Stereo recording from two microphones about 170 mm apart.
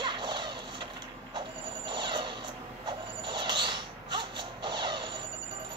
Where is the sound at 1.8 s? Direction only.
25° right (ahead or behind).